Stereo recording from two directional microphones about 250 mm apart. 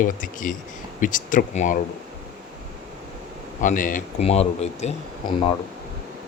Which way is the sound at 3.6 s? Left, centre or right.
Left.